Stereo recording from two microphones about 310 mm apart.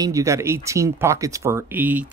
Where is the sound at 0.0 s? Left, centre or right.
Centre.